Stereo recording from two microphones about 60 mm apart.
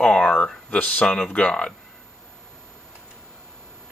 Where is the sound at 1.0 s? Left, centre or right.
Centre.